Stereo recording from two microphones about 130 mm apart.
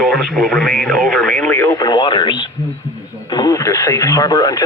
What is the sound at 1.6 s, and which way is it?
Speech, 25° left (ahead or behind).